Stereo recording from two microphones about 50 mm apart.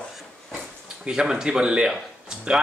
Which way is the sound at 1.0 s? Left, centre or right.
Centre.